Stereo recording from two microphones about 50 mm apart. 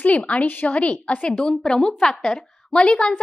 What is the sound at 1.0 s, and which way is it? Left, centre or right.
A woman's voice, left.